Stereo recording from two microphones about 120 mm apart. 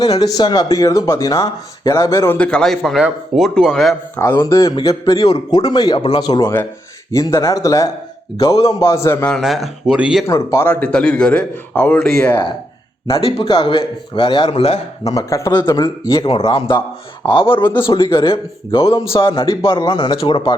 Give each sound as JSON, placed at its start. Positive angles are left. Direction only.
{"t": 0.0, "sound": "speech", "side_deg": 35}
{"t": 2.4, "sound": "speech", "side_deg": 5}
{"t": 4.2, "sound": "speech", "side_deg": 20}
{"t": 5.1, "sound": "a man's voice", "side_deg": 55}
{"t": 5.5, "sound": "speech", "side_deg": 35}
{"t": 9.4, "sound": "speech", "side_deg": -5}
{"t": 10.2, "sound": "a man's voice", "side_deg": 20}
{"t": 12.0, "sound": "speech", "side_deg": 5}
{"t": 13.1, "sound": "a man's voice", "side_deg": 50}
{"t": 13.5, "sound": "a man's voice", "side_deg": 40}
{"t": 15.1, "sound": "speech", "side_deg": 30}
{"t": 16.2, "sound": "a man's voice", "side_deg": 50}